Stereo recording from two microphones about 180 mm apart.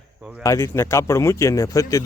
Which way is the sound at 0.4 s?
15° left (ahead or behind).